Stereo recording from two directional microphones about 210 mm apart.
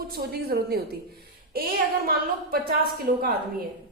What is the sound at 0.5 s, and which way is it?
Speech, 50° right (ahead or behind).